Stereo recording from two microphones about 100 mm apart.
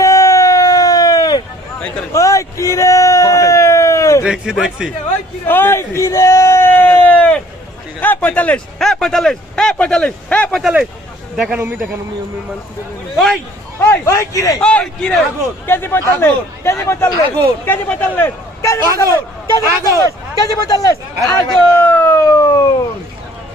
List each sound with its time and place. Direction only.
0.0 s a sound: 30° left (ahead or behind)
4.2 s a man's voice: 5° right (ahead or behind)
5.5 s whoop: 20° left (ahead or behind)
8.0 s speech: 15° left (ahead or behind)
8.8 s speech: 5° left (ahead or behind)
10.6 s a man's voice: 5° right (ahead or behind)
11.6 s a man's voice: 20° right (ahead or behind)
13.7 s a man's voice: 30° left (ahead or behind)
14.6 s a man's voice: 10° left (ahead or behind)
15.6 s a man's voice: 20° left (ahead or behind)
18.6 s a sound: 30° left (ahead or behind)
18.9 s speech: 30° left (ahead or behind)
22.2 s siren: 35° left (ahead or behind)